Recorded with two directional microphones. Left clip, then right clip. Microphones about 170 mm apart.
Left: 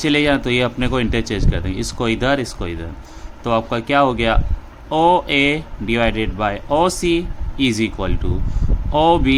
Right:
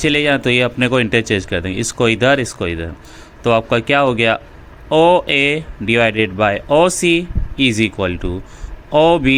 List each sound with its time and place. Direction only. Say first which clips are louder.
0.0 s speech: right 2 dB; 15° right (ahead or behind)